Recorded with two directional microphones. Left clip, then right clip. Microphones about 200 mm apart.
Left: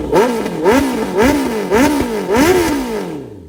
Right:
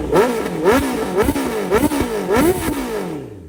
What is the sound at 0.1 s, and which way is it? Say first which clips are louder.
Vehicle: left 2 dB; 20° left (ahead or behind).